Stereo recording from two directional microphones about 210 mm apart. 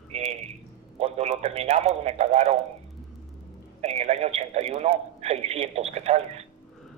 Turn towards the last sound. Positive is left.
turn(degrees=-30)  # may be behind; listen again after turning